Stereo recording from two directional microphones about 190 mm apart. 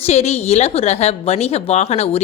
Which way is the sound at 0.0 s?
35° left (ahead or behind).